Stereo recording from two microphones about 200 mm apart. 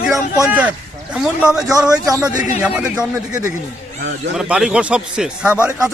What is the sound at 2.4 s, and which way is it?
Speech, 40° left (ahead or behind).